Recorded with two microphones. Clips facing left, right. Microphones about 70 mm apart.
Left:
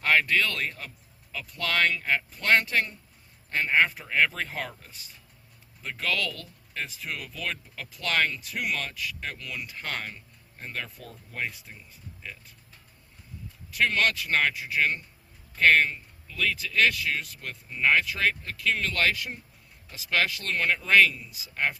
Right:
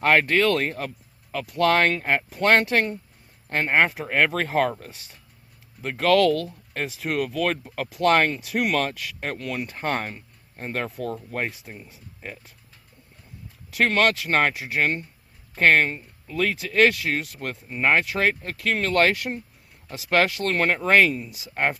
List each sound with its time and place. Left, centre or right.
0.0 s speech: right
8.0 s speech: right
8.4 s speech: right
13.7 s speech: right
17.7 s speech: right